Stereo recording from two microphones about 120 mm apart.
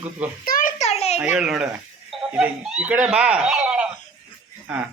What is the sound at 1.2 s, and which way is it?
A man's voice, 10° right (ahead or behind).